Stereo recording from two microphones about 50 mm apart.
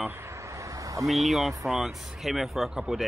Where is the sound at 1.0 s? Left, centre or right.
Centre.